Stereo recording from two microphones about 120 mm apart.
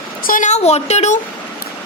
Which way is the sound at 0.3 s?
80° left.